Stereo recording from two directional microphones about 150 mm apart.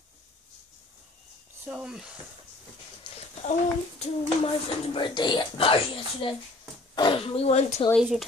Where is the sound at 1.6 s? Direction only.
5° right (ahead or behind).